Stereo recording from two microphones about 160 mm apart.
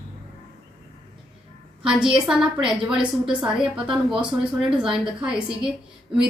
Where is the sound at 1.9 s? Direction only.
5° right (ahead or behind).